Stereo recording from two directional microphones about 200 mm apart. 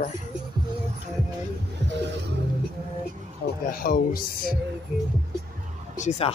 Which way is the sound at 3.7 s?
45° left (ahead or behind).